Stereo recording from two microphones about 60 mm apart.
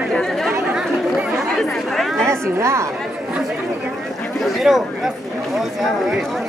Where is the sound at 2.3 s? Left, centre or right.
Right.